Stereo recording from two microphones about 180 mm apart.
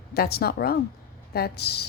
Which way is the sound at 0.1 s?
60° left (ahead or behind).